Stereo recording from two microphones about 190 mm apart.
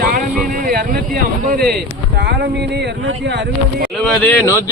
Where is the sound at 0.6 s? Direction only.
50° right (ahead or behind).